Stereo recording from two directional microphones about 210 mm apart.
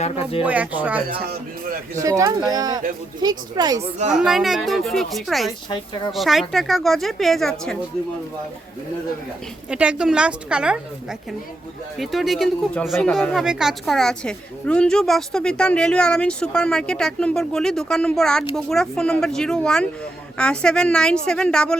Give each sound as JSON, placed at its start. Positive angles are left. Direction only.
{"t": 0.0, "sound": "a woman's voice", "side_deg": 25}
{"t": 0.4, "sound": "speech", "side_deg": -5}
{"t": 4.2, "sound": "speech", "side_deg": 0}
{"t": 5.7, "sound": "a woman's voice", "side_deg": 25}
{"t": 6.1, "sound": "speech", "side_deg": 0}
{"t": 9.6, "sound": "speech", "side_deg": -5}
{"t": 11.9, "sound": "speech", "side_deg": 0}